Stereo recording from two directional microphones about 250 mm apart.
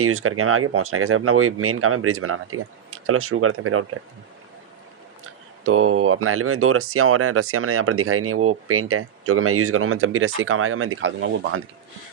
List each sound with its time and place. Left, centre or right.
0.0 s speech: right
5.6 s speech: right